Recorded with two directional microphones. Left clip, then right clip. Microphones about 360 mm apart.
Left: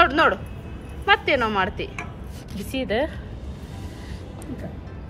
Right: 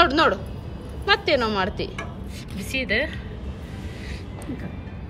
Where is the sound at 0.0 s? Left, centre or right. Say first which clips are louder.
Left 1 dB; centre.